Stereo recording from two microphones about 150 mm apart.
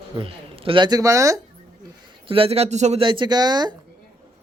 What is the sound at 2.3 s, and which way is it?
Speech, 40° right (ahead or behind).